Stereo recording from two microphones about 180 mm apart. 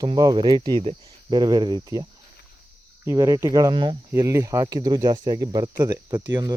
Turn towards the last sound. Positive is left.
turn(degrees=-20)  # may be behind; listen again after turning